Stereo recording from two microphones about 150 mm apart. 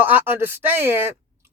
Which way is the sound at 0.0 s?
10° right (ahead or behind).